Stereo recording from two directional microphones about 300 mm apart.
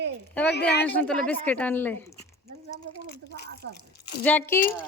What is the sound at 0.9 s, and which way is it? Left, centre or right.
A woman's voice, centre.